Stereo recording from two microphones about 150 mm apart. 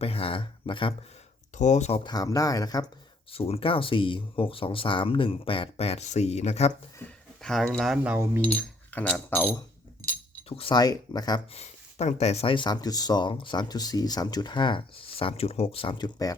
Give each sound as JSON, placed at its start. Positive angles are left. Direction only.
{"t": 0.0, "sound": "speech", "side_deg": 40}
{"t": 1.5, "sound": "speech", "side_deg": 50}
{"t": 2.0, "sound": "speech", "side_deg": 25}
{"t": 3.3, "sound": "speech", "side_deg": 40}
{"t": 7.0, "sound": "speech", "side_deg": 5}
{"t": 8.0, "sound": "speech", "side_deg": -15}
{"t": 8.4, "sound": "speech", "side_deg": 10}
{"t": 10.5, "sound": "speech", "side_deg": 35}
{"t": 11.5, "sound": "speech", "side_deg": 45}